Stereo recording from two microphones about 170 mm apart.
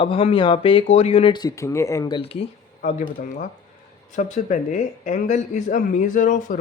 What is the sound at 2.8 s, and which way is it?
Speech, 55° left (ahead or behind).